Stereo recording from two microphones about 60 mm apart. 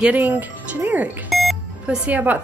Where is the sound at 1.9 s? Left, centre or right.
Right.